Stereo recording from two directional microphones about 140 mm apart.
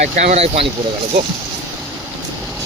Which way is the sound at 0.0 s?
55° right (ahead or behind).